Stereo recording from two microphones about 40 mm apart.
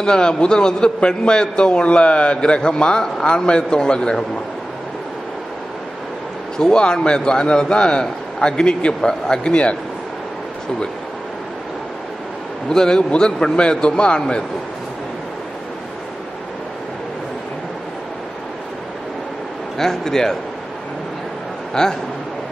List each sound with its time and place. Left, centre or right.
0.0 s a man's voice: left
6.6 s a man's voice: centre
12.6 s a man's voice: centre
19.8 s a man's voice: centre
21.8 s a man's voice: centre